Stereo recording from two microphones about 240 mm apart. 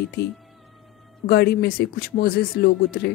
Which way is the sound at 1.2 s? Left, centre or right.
Left.